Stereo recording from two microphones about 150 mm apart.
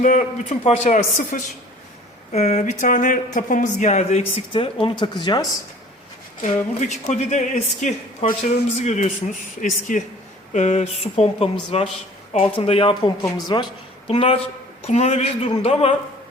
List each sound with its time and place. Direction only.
0.0 s speech: 55° left (ahead or behind); by 5.5 s 25° left (ahead or behind)
6.4 s a woman's voice: 50° left (ahead or behind)